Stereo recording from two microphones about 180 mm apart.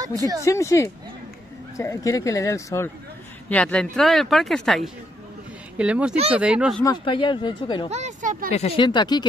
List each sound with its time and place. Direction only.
0.0 s speech: 20° right (ahead or behind)
0.5 s speech: 15° left (ahead or behind); by 6.8 s 5° right (ahead or behind)
6.8 s speech: 25° left (ahead or behind)
7.9 s speech: 40° right (ahead or behind)
8.5 s speech: 35° left (ahead or behind)